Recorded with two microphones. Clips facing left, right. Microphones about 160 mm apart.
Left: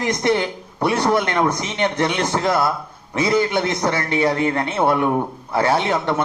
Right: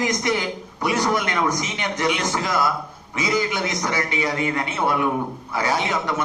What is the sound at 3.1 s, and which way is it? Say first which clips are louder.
Speech: left 5 dB; 55° left (ahead or behind).